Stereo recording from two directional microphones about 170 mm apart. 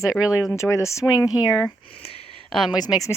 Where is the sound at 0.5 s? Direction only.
15° left (ahead or behind).